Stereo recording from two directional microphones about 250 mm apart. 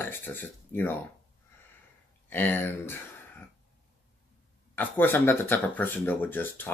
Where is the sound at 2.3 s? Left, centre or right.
Centre.